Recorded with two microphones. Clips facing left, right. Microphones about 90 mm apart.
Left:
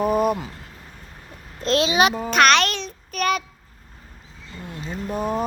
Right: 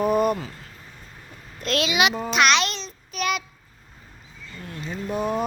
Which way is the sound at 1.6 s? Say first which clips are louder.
Left 4 dB; 30° left (ahead or behind).